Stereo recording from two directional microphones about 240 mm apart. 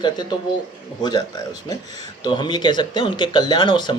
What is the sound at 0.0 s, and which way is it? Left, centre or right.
Speech, centre.